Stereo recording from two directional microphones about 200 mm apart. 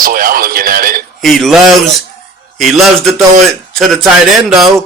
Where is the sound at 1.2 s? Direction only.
Centre (ahead or behind).